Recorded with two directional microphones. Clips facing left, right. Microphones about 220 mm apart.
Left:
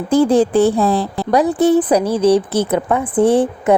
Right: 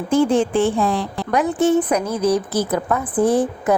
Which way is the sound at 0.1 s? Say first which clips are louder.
Left 4 dB; 35° left (ahead or behind).